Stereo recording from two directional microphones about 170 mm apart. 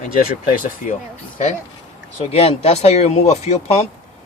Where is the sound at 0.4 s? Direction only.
50° left (ahead or behind).